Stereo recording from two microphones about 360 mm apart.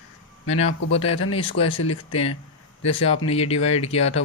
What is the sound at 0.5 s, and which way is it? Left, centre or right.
Speech, centre.